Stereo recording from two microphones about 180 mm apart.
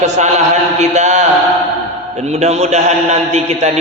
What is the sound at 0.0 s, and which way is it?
A man's voice, 40° right (ahead or behind).